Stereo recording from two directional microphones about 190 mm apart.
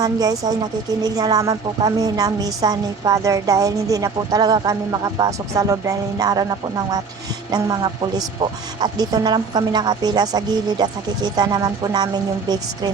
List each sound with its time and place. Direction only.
0.0 s a woman's voice: 20° right (ahead or behind)
7.5 s a woman's voice: 20° right (ahead or behind)